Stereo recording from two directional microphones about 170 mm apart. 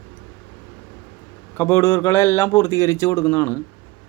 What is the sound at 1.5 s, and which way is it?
Speech, 15° left (ahead or behind).